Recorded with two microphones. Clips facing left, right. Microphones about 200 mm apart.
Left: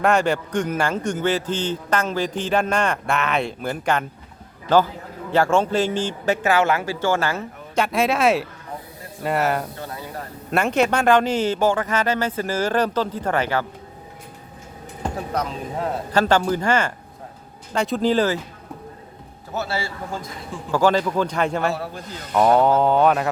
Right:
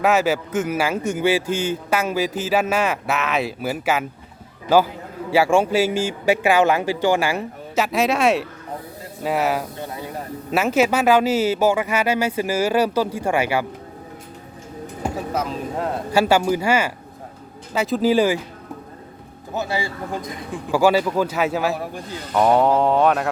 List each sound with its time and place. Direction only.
0.0 s a man's voice: 5° right (ahead or behind)
7.9 s a man's voice: centre (ahead or behind)
9.7 s a sound: 20° right (ahead or behind)
10.5 s speech: 5° right (ahead or behind)
15.0 s speech: centre (ahead or behind)
19.5 s a man's voice: 15° right (ahead or behind); by 23.3 s centre (ahead or behind)